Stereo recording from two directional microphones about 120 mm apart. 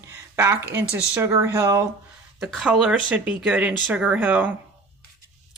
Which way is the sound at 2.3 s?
Centre (ahead or behind).